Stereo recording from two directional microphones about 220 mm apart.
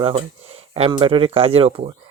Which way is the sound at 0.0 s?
25° right (ahead or behind).